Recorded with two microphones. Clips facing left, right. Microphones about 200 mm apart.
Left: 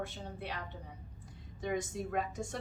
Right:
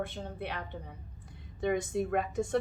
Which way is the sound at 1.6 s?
55° right (ahead or behind).